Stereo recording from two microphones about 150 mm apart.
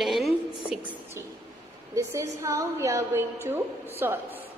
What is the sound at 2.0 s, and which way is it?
A woman's voice, 20° right (ahead or behind).